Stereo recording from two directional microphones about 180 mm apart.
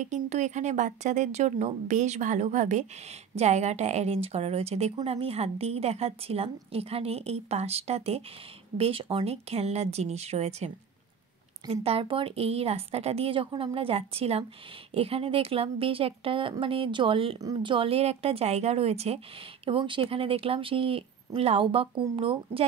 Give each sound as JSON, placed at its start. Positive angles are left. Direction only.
{"t": 0.0, "sound": "speech", "side_deg": -40}